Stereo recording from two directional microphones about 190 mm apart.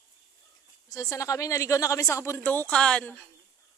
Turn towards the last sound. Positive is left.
turn(degrees=5)  # may be behind; listen again after turning